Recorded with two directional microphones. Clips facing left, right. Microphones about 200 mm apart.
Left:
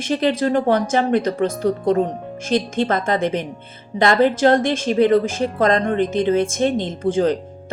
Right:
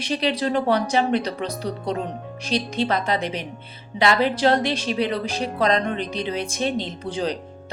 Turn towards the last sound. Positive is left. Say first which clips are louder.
# left 8 dB
turn(degrees=50)  # may be behind; listen again after turning